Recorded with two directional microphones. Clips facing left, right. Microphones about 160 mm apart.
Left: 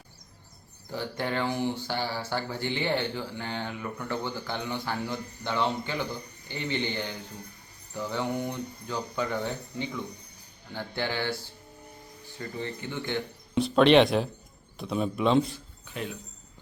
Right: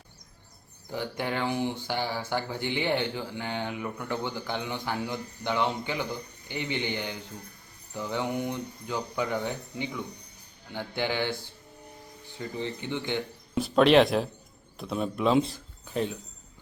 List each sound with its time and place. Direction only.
0.9 s speech: 15° right (ahead or behind)
12.4 s speech: 20° right (ahead or behind)
13.5 s speech: centre (ahead or behind)
15.5 s a sound: 35° right (ahead or behind)